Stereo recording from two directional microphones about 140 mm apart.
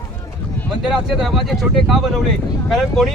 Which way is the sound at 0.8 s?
Centre (ahead or behind).